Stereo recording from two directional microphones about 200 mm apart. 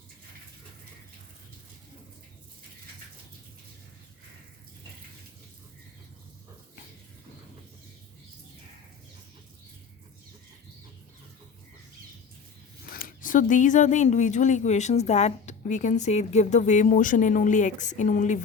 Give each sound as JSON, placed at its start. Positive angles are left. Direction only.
{"t": 12.9, "sound": "speech", "side_deg": 45}